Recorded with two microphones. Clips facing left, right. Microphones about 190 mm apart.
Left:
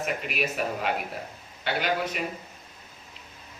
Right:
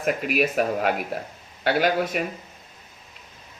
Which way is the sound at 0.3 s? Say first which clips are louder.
Right 7 dB; 50° right (ahead or behind).